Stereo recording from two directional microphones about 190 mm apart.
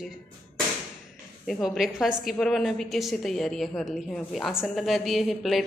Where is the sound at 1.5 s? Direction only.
Centre (ahead or behind).